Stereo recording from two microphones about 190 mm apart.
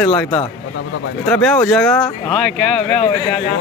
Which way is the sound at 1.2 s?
5° left (ahead or behind).